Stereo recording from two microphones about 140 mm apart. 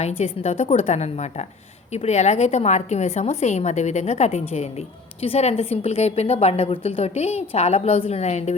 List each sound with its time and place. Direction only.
0.2 s a woman's voice: 50° left (ahead or behind)